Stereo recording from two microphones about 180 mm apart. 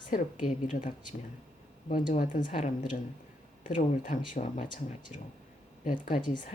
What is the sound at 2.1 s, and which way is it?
Speech, 45° left (ahead or behind).